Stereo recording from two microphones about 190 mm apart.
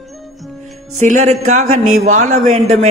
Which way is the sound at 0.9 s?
40° right (ahead or behind).